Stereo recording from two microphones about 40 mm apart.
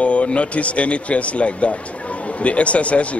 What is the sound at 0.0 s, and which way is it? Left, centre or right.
Speech, left.